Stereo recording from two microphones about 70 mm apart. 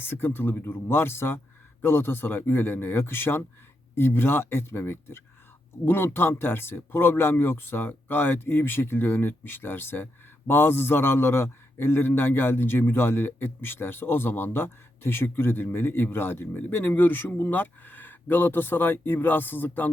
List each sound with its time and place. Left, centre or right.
0.0 s speech: left